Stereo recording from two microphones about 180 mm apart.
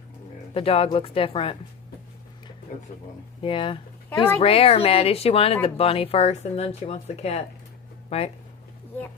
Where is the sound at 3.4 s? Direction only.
30° left (ahead or behind).